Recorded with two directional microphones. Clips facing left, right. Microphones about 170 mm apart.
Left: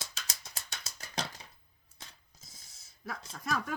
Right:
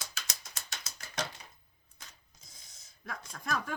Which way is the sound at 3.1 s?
5° left (ahead or behind).